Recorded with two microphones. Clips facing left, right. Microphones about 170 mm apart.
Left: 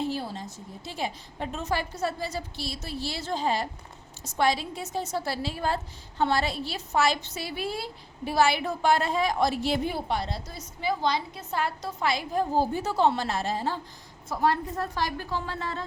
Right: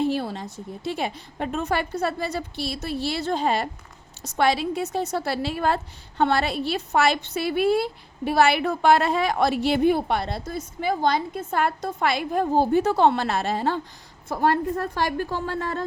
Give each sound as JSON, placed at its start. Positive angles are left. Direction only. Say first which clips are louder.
{"t": 0.0, "sound": "a woman's voice", "louder": "right 6 dB", "side_deg": -65}